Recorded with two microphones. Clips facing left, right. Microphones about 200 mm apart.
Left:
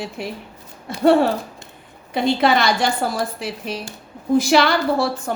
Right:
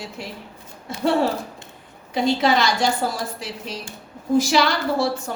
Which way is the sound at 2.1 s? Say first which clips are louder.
Left 2 dB; 60° left (ahead or behind).